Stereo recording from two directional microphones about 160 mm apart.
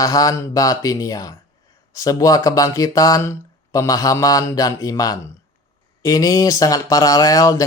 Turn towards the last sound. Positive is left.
turn(degrees=20)  # may be behind; listen again after turning